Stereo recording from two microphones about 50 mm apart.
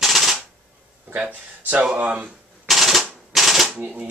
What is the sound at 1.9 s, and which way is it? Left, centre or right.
Speech, right.